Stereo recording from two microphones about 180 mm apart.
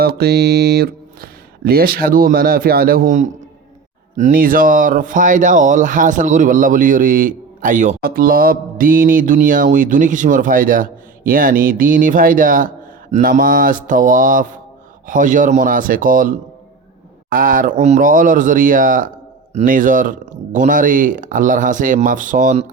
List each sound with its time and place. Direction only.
0.0 s speech: 60° right (ahead or behind); by 22.6 s 45° right (ahead or behind)